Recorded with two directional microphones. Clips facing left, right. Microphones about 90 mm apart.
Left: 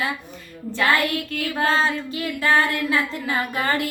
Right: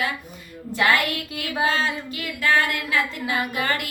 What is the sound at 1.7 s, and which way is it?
Female singing, 35° left (ahead or behind).